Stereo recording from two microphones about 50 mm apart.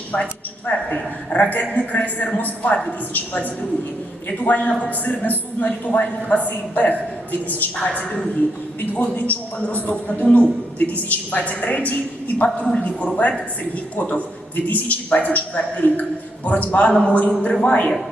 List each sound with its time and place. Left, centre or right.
0.1 s a woman's voice: left